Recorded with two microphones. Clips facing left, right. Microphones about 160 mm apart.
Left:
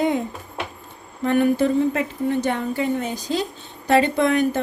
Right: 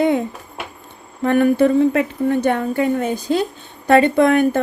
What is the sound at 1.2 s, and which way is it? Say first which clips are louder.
A woman's voice: right 4 dB; 55° right (ahead or behind).